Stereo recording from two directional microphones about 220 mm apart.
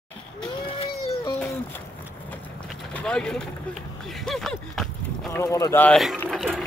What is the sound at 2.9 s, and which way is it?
Speech, 5° left (ahead or behind).